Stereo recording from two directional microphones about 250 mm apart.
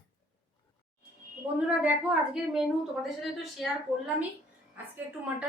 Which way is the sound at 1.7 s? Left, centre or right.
Centre.